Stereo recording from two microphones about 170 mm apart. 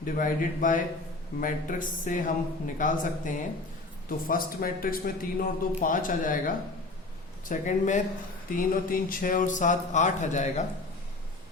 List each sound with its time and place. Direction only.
0.0 s a man's voice: 50° left (ahead or behind)